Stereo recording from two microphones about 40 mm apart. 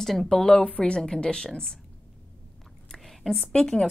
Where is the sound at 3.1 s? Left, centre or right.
Centre.